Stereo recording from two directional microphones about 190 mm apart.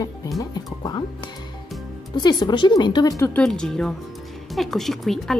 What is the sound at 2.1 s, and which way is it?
A woman's voice, 20° left (ahead or behind).